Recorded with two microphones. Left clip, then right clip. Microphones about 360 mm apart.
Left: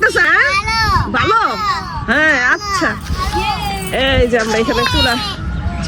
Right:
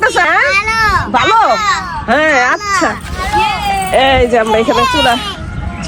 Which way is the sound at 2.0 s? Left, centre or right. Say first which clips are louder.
Right 2 dB; centre.